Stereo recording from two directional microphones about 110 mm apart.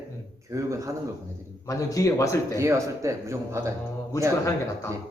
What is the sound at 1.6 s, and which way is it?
Speech, 30° left (ahead or behind).